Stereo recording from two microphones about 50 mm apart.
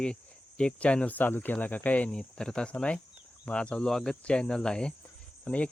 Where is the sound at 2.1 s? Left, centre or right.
Centre.